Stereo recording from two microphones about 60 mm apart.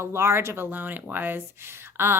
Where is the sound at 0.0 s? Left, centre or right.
Right.